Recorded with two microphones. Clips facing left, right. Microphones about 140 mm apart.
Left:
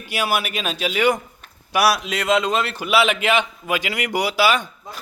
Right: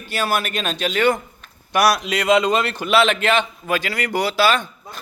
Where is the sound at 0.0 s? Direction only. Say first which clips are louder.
Right 1 dB; 10° left (ahead or behind).